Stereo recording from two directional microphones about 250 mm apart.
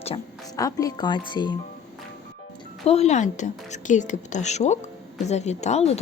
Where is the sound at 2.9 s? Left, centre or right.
Left.